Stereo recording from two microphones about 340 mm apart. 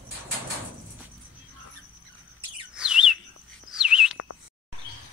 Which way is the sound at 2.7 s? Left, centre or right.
Centre.